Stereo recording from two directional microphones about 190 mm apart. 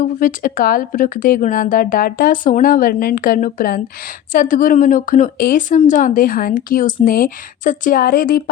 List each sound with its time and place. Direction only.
0.0 s speech: 45° left (ahead or behind)